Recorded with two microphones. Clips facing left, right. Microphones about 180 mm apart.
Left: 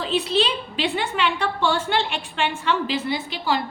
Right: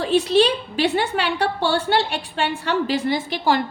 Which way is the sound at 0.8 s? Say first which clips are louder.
Right 3 dB; 40° right (ahead or behind).